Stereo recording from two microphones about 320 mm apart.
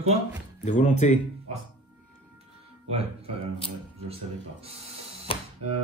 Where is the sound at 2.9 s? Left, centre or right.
Centre.